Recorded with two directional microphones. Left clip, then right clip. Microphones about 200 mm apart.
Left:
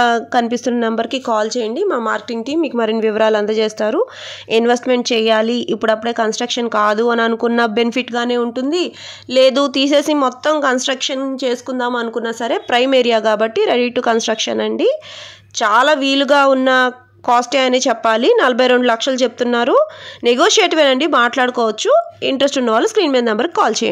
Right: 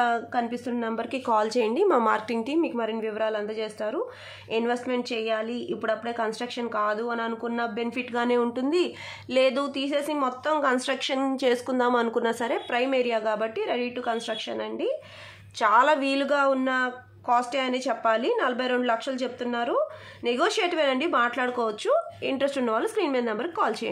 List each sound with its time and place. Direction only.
0.0 s speech: 40° left (ahead or behind)
1.3 s a woman's voice: 20° left (ahead or behind); by 8.1 s 45° left (ahead or behind)
8.1 s speech: 30° left (ahead or behind)
12.4 s speech: 40° left (ahead or behind)
15.6 s a woman's voice: 30° left (ahead or behind)